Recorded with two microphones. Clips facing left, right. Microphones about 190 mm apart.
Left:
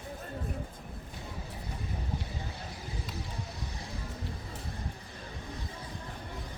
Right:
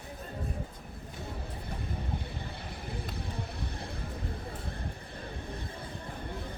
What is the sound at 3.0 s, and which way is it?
Vehicle, 60° right (ahead or behind).